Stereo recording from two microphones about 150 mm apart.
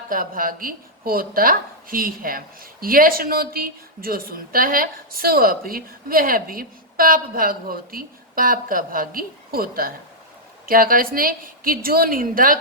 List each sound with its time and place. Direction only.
0.1 s a woman's voice: 70° right (ahead or behind)